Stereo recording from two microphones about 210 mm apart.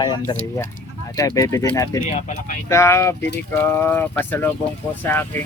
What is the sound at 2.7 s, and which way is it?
Speech, 15° left (ahead or behind).